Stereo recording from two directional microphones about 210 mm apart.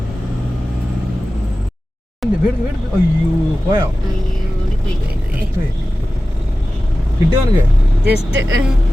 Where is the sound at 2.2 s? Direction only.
Centre (ahead or behind).